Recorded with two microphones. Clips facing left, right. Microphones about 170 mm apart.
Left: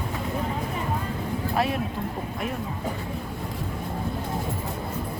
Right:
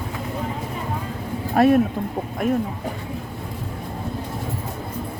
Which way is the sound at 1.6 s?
50° right (ahead or behind).